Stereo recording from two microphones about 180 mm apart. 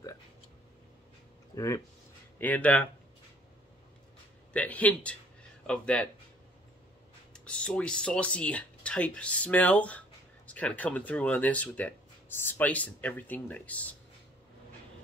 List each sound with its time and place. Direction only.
1.5 s speech: 15° left (ahead or behind)
4.5 s speech: 10° left (ahead or behind)
7.3 s speech: 5° left (ahead or behind)